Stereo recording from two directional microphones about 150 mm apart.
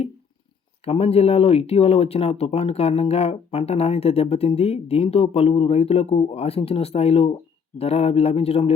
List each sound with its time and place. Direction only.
0.9 s speech: 40° left (ahead or behind)